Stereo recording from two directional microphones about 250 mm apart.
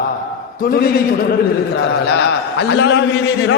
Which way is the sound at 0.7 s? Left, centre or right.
Left.